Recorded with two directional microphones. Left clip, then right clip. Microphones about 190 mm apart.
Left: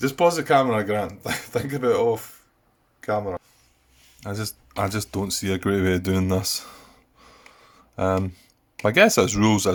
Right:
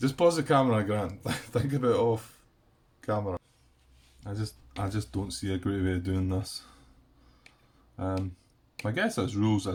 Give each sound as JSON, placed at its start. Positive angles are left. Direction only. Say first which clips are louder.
{"t": 0.0, "sound": "a man's voice", "louder": "left 5 dB", "side_deg": 20}
{"t": 4.2, "sound": "speech", "louder": "left 8 dB", "side_deg": 45}
{"t": 7.9, "sound": "speech", "louder": "left 11 dB", "side_deg": 50}